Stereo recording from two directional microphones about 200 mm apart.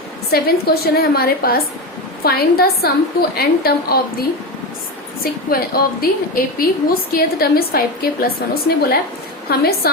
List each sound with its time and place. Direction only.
0.3 s a woman's voice: 50° left (ahead or behind)